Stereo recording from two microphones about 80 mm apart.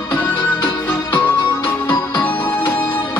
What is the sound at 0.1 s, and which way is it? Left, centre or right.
Music, left.